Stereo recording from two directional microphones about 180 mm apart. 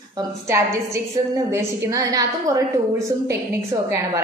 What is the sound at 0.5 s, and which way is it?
A woman's voice, 15° right (ahead or behind).